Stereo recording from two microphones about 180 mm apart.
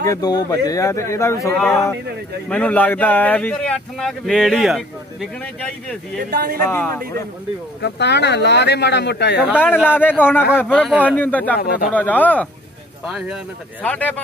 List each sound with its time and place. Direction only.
0.0 s speech: 20° left (ahead or behind)
6.3 s speech: 50° right (ahead or behind)
6.6 s speech: 10° left (ahead or behind)
7.8 s speech: 70° left (ahead or behind)
9.8 s speech: 10° left (ahead or behind)
10.9 s speech: 5° right (ahead or behind)
11.1 s speech: 10° left (ahead or behind)
11.5 s a man's voice: 55° left (ahead or behind)
11.9 s speech: 10° left (ahead or behind)
13.0 s speech: 5° right (ahead or behind)
13.8 s speech: 10° left (ahead or behind)